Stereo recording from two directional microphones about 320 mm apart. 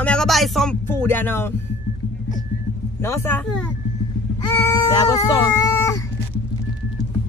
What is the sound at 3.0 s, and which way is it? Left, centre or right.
Speech, centre.